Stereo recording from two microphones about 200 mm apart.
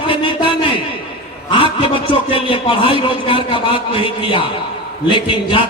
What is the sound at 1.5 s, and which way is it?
A man's voice, 25° left (ahead or behind).